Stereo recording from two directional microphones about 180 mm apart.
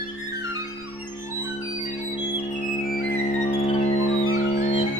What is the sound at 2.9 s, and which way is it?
Music, 40° left (ahead or behind).